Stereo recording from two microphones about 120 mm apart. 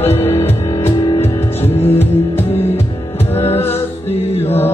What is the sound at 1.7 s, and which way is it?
Music, 20° left (ahead or behind).